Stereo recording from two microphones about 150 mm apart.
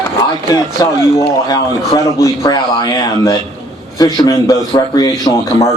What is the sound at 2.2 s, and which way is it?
Speech, 25° left (ahead or behind).